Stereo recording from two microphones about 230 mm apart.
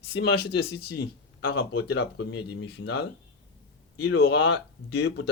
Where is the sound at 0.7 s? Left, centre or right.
Left.